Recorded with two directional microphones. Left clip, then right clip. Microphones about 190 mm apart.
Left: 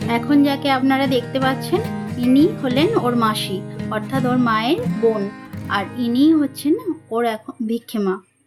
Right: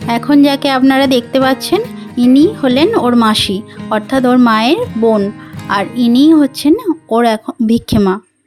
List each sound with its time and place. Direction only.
0.1 s speech: 55° right (ahead or behind)